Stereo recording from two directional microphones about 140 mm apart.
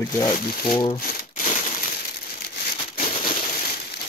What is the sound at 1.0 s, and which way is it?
Crushing, 80° left.